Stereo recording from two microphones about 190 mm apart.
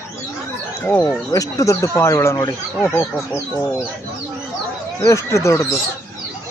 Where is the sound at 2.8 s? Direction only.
5° left (ahead or behind).